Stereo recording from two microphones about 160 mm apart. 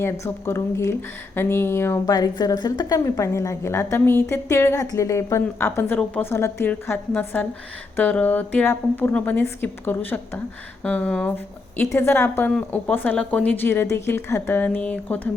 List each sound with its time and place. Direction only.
0.0 s a woman's voice: 15° left (ahead or behind)